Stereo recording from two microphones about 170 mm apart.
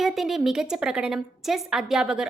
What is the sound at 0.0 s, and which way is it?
A woman's voice, centre (ahead or behind).